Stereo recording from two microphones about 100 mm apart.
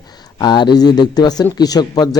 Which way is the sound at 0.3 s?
45° left (ahead or behind).